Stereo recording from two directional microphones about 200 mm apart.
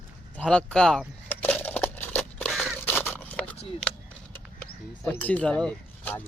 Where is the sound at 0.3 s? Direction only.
5° left (ahead or behind).